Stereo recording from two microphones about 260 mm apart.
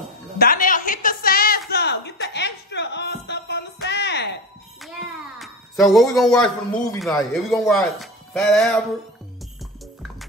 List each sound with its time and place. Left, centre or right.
0.4 s music: left
1.7 s a sound: left
5.4 s speech: centre